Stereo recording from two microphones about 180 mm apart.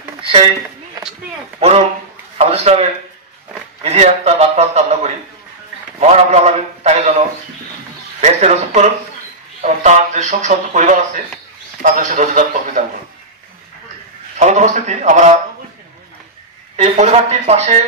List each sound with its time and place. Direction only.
2.3 s a man's voice: 35° right (ahead or behind)
14.4 s a man's voice: 40° right (ahead or behind)
16.7 s a man's voice: 40° right (ahead or behind)